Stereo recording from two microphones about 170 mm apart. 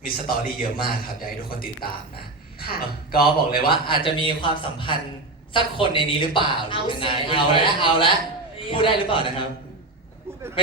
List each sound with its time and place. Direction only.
0.0 s a man's voice: 60° left (ahead or behind)
3.7 s a man's voice: 30° left (ahead or behind)